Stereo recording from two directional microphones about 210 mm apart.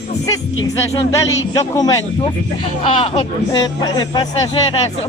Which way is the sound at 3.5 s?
20° left (ahead or behind).